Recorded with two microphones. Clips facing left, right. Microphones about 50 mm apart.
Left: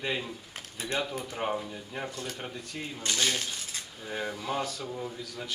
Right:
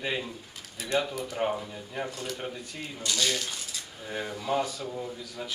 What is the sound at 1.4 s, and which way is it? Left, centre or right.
Speech, centre.